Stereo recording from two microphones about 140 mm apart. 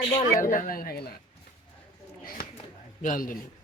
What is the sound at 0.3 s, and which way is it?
Speech, 75° left (ahead or behind).